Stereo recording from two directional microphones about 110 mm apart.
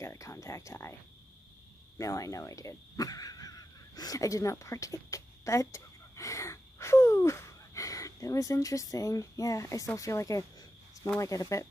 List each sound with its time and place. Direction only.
0.0 s speech: 25° left (ahead or behind)
2.0 s speech: 30° left (ahead or behind)